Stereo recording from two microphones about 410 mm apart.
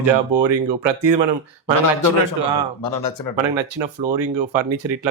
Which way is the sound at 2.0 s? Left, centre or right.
Right.